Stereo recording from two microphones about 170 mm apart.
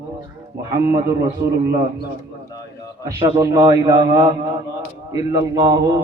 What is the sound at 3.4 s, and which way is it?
A man's voice, 20° right (ahead or behind).